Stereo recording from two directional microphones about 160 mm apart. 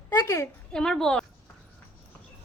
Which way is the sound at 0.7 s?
5° left (ahead or behind).